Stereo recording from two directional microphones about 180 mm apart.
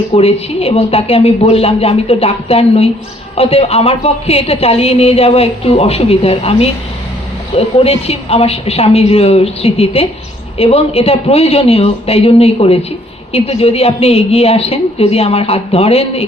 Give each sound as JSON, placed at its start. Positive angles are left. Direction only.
{"t": 0.1, "sound": "a woman's voice", "side_deg": 35}